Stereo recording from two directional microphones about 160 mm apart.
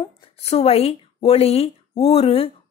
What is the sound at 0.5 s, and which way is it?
Speech, 40° left (ahead or behind).